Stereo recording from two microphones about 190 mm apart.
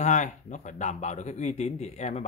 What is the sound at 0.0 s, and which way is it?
Speech, 40° left (ahead or behind).